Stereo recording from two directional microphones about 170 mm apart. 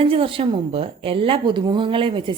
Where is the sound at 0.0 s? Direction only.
35° right (ahead or behind).